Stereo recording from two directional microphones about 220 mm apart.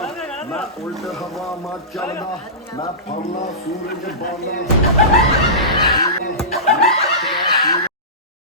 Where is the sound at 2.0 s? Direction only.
15° left (ahead or behind).